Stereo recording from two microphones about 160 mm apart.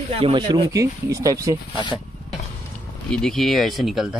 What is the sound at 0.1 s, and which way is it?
A man's voice, 35° right (ahead or behind).